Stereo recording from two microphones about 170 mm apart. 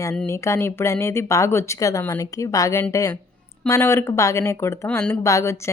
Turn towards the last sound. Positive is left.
turn(degrees=15)  # may be behind; listen again after turning